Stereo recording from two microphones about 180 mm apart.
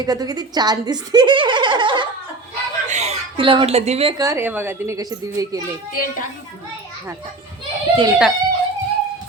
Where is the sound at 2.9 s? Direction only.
40° right (ahead or behind).